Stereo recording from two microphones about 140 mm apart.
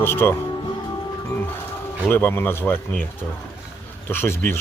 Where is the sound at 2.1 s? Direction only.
15° left (ahead or behind).